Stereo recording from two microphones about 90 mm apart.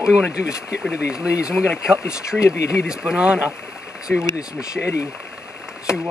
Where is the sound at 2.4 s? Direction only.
35° left (ahead or behind).